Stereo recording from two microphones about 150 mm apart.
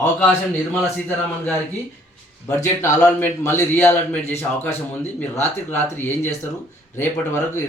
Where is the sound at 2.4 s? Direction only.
15° left (ahead or behind).